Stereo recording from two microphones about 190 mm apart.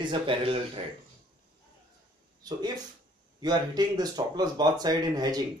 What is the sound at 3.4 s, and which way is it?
Speech, 20° right (ahead or behind).